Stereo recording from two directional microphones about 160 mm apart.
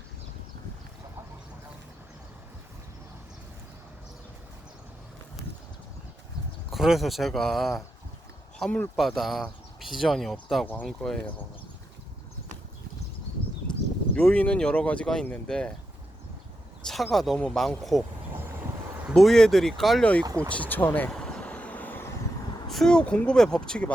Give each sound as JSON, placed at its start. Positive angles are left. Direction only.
{"t": 6.7, "sound": "speech", "side_deg": 0}
{"t": 13.7, "sound": "a sound", "side_deg": 30}
{"t": 14.2, "sound": "speech", "side_deg": 5}
{"t": 16.8, "sound": "speech", "side_deg": 0}
{"t": 19.1, "sound": "speech", "side_deg": 5}
{"t": 20.2, "sound": "speech", "side_deg": -20}
{"t": 20.5, "sound": "speech", "side_deg": 10}
{"t": 21.1, "sound": "vehicle", "side_deg": 5}
{"t": 22.7, "sound": "speech", "side_deg": 5}